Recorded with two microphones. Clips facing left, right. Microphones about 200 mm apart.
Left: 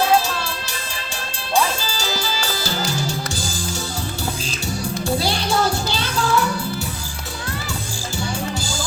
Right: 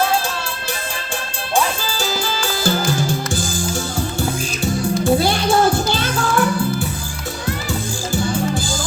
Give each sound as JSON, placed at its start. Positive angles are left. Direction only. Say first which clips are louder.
{"t": 1.5, "sound": "music", "louder": "right 1 dB", "side_deg": -55}
{"t": 8.1, "sound": "music", "louder": "right 6 dB", "side_deg": -50}